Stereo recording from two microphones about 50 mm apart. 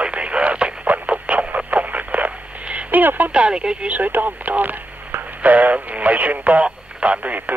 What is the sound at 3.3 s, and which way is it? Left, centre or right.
Speech, centre.